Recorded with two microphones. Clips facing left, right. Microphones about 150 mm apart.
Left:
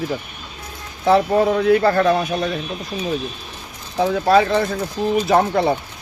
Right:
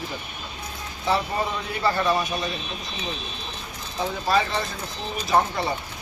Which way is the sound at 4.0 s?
75° left (ahead or behind).